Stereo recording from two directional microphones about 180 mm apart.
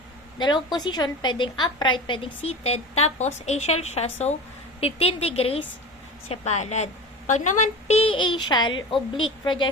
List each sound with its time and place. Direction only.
0.3 s a woman's voice: 25° left (ahead or behind)